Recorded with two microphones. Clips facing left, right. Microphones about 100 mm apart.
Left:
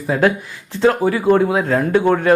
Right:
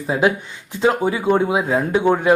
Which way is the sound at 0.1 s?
10° right (ahead or behind).